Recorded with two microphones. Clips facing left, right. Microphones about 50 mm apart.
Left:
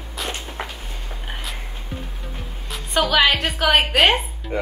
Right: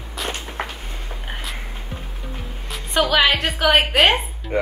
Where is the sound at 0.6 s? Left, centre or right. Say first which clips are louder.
Right 3 dB; right.